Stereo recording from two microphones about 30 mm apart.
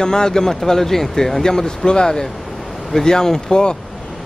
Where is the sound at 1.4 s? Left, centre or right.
Left.